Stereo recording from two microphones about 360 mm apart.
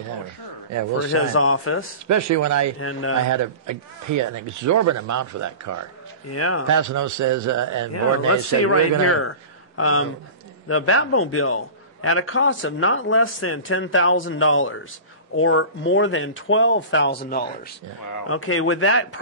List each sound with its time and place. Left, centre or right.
1.0 s a man's voice: left
2.0 s speech: right
2.8 s a man's voice: left
3.3 s speech: right
6.2 s a man's voice: left
6.7 s speech: right
8.3 s a man's voice: left
18.3 s a man's voice: left